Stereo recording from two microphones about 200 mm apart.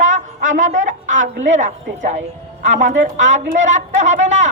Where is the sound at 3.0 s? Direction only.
35° right (ahead or behind).